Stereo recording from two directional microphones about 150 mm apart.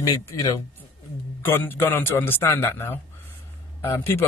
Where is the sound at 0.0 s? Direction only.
25° left (ahead or behind).